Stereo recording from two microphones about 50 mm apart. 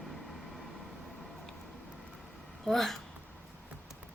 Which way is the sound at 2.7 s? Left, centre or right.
Centre.